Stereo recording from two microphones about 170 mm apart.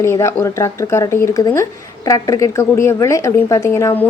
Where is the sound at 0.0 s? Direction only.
15° left (ahead or behind).